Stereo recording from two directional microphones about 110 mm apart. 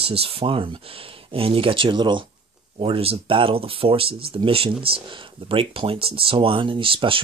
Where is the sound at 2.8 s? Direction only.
60° right (ahead or behind).